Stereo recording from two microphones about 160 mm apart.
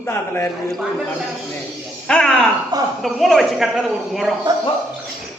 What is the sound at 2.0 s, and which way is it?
A woman's voice, 5° left (ahead or behind).